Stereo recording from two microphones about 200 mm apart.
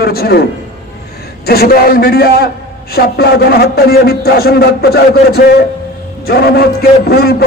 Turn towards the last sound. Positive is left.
turn(degrees=50)  # may be behind; listen again after turning